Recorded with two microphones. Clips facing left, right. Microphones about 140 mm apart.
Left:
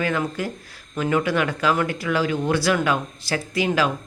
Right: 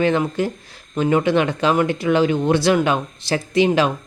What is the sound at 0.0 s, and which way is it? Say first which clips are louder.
Speech: right 6 dB; 25° right (ahead or behind).